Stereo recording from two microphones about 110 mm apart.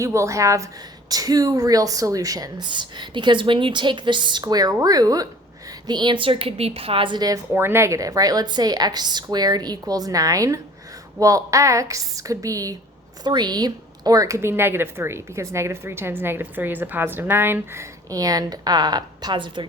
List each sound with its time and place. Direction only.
0.0 s speech: 25° right (ahead or behind)
5.9 s a woman's voice: 45° right (ahead or behind)
7.5 s speech: 20° right (ahead or behind)
18.1 s speech: 35° right (ahead or behind)